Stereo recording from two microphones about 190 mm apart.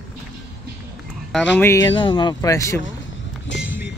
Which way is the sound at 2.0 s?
25° left (ahead or behind).